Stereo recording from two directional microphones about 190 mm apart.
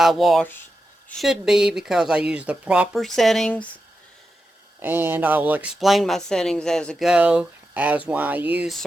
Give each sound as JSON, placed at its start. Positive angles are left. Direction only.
{"t": 0.0, "sound": "speech", "side_deg": 0}
{"t": 4.8, "sound": "speech", "side_deg": -10}